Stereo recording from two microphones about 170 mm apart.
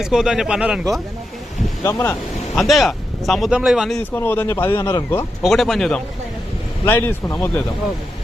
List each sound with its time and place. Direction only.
0.0 s speech: 5° right (ahead or behind)
1.8 s speech: 15° left (ahead or behind)
2.6 s speech: centre (ahead or behind)
4.1 s speech: 10° left (ahead or behind)
5.4 s speech: centre (ahead or behind)
6.8 s speech: 10° left (ahead or behind)